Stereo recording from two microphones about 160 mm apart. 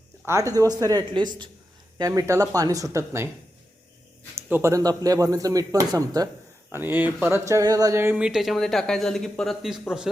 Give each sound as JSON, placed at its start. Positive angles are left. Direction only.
{"t": 0.3, "sound": "speech", "side_deg": -20}
{"t": 4.4, "sound": "speech", "side_deg": -15}